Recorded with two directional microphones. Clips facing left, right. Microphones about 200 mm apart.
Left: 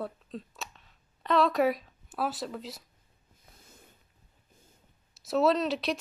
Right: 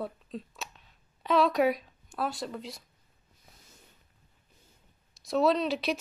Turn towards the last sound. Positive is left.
turn(degrees=0)  # may be behind; listen again after turning